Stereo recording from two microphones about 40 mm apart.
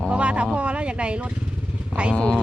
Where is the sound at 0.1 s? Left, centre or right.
Right.